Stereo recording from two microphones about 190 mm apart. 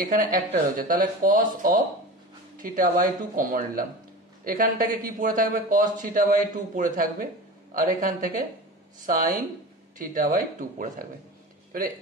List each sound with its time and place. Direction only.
0.0 s a man's voice: 45° right (ahead or behind)
2.5 s a man's voice: 45° right (ahead or behind)